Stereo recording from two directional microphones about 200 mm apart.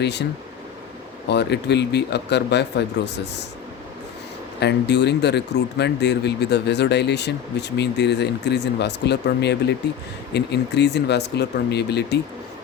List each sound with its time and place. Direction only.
0.0 s speech: 60° left (ahead or behind)
1.3 s speech: 55° left (ahead or behind)
4.6 s speech: 60° left (ahead or behind)